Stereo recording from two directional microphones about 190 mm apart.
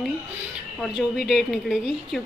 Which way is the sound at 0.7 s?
Centre (ahead or behind).